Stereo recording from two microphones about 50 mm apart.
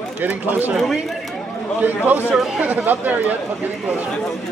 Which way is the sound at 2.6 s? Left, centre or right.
Right.